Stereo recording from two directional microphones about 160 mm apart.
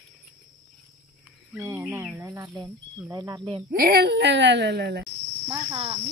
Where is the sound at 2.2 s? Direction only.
25° right (ahead or behind).